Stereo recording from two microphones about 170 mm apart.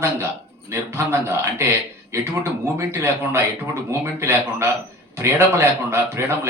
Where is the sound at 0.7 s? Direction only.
15° right (ahead or behind).